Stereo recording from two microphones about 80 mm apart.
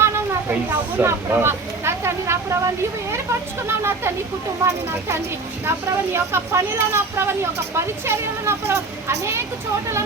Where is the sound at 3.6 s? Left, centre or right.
Right.